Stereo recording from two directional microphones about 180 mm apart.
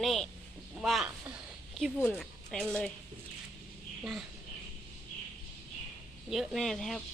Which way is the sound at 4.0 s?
Centre (ahead or behind).